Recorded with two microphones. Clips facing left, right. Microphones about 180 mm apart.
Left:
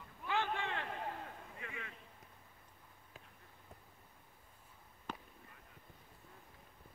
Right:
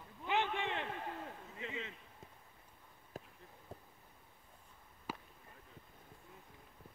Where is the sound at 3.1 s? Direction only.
40° right (ahead or behind).